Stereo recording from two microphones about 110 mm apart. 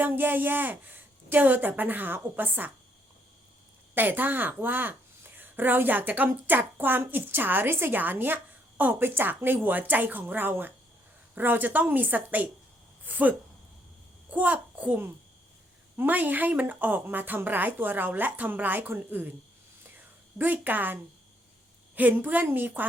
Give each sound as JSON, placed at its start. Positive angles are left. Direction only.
{"t": 0.0, "sound": "a woman's voice", "side_deg": -15}
{"t": 3.9, "sound": "a woman's voice", "side_deg": -20}
{"t": 20.4, "sound": "a woman's voice", "side_deg": -15}